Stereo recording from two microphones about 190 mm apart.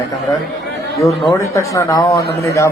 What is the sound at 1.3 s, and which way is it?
Speech, 15° left (ahead or behind).